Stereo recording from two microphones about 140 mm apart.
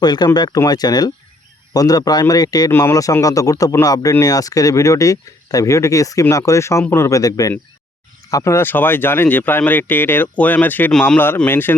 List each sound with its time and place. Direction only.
0.0 s speech: 30° left (ahead or behind); by 11.7 s 15° left (ahead or behind)